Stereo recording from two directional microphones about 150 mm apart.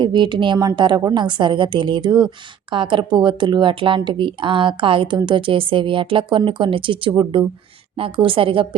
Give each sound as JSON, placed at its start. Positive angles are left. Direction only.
{"t": 0.0, "sound": "a woman's voice", "side_deg": -30}